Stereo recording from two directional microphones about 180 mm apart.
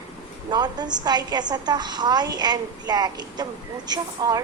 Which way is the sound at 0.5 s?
25° right (ahead or behind).